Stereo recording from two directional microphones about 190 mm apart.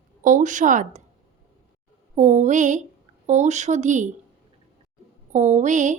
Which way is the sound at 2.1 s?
40° right (ahead or behind).